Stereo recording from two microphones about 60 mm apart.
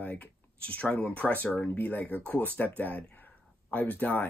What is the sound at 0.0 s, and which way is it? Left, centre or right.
Speech, left.